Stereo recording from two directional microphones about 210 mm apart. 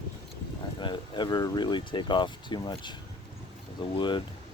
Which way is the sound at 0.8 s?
20° left (ahead or behind).